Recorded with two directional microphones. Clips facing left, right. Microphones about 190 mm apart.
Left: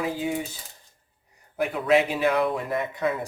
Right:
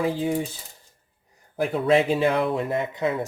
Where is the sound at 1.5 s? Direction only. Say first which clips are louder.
Right 1 dB; 30° right (ahead or behind).